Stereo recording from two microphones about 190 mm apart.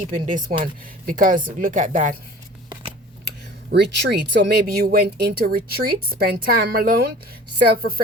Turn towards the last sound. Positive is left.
turn(degrees=-55)  # may be behind; listen again after turning